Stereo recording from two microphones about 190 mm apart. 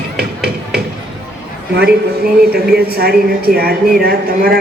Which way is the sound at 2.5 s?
55° right (ahead or behind).